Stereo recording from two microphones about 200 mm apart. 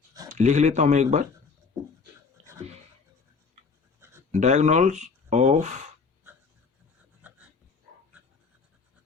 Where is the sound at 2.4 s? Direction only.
35° right (ahead or behind).